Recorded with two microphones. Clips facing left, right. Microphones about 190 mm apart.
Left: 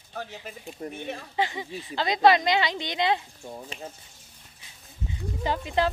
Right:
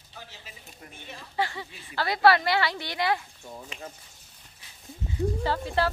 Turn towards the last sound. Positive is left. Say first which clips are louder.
# left 1 dB
turn(degrees=15)  # may be behind; listen again after turning